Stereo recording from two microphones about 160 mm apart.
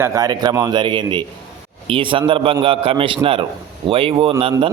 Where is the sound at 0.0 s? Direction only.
20° right (ahead or behind).